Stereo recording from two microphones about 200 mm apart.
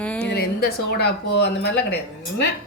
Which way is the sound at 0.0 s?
5° left (ahead or behind).